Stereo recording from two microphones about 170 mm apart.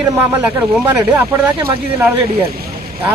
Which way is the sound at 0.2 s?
5° right (ahead or behind).